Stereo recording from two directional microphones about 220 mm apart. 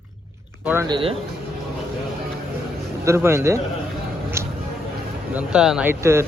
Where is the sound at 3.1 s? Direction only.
10° right (ahead or behind).